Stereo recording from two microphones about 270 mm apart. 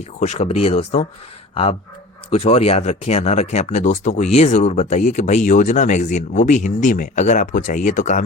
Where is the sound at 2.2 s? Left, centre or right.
Left.